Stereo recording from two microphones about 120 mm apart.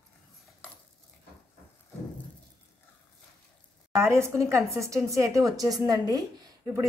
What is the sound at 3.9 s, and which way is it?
A woman's voice, 20° right (ahead or behind).